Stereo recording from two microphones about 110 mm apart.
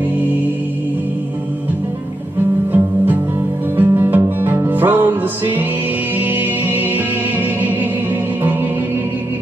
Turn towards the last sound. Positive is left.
turn(degrees=-15)  # may be behind; listen again after turning